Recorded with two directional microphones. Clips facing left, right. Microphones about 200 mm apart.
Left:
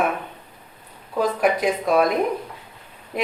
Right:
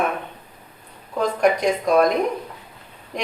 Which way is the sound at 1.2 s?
5° left (ahead or behind).